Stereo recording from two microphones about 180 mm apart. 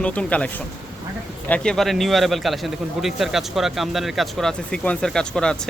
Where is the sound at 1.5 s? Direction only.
5° left (ahead or behind).